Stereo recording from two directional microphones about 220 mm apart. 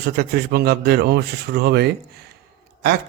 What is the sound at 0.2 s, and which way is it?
A man's voice, 45° right (ahead or behind).